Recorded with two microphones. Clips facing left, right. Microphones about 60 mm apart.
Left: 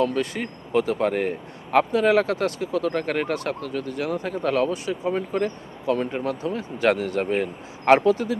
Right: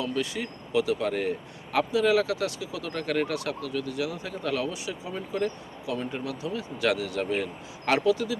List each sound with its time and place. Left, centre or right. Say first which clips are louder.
0.0 s speech: left 6 dB; left